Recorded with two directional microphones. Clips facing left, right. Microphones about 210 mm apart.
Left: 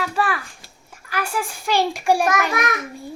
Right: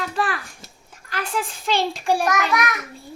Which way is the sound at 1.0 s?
10° left (ahead or behind).